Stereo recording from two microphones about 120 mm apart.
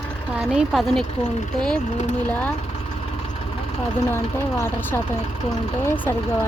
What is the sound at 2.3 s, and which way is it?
Speech, 10° left (ahead or behind).